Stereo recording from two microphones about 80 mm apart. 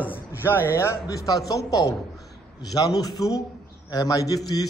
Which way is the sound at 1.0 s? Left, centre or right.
Left.